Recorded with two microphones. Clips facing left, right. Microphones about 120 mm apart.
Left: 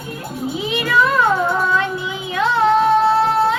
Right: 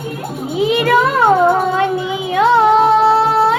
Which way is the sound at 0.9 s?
55° right (ahead or behind).